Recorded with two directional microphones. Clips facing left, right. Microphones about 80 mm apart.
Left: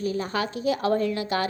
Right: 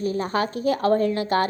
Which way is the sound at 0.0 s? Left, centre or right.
Right.